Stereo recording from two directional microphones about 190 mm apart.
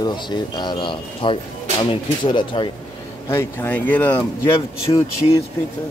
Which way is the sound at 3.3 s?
15° left (ahead or behind).